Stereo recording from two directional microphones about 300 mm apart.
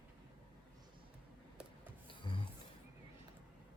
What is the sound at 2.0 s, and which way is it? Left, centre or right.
Music, centre.